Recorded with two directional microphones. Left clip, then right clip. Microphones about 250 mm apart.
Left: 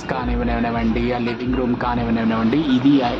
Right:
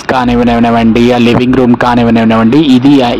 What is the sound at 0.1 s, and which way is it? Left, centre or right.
A man's voice, right.